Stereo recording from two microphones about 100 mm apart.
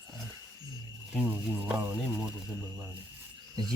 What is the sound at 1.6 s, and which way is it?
Speech, 10° right (ahead or behind).